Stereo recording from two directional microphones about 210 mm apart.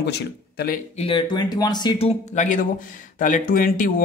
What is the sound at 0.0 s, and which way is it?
Speech, 50° left (ahead or behind).